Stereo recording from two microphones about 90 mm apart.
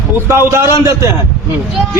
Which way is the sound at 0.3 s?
30° right (ahead or behind).